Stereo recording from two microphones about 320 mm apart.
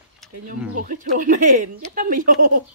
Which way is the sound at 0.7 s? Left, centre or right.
Right.